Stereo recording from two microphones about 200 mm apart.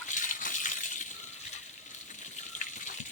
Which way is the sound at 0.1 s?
40° left (ahead or behind).